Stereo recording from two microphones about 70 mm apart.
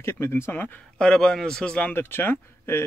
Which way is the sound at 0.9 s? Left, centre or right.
Centre.